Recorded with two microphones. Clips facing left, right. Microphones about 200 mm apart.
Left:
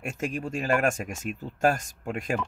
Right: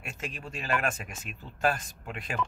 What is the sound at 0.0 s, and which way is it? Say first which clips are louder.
Speech: left 9 dB; 45° left (ahead or behind).